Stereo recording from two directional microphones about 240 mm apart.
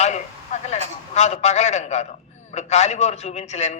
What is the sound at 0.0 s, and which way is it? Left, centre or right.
A man's voice, left.